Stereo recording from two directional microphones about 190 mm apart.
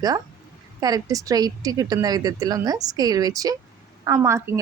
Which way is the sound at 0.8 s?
20° right (ahead or behind).